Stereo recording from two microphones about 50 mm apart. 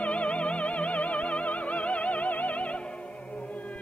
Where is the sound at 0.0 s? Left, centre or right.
Left.